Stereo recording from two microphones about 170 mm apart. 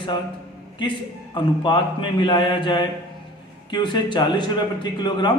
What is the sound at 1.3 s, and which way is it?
A man's voice, 30° left (ahead or behind).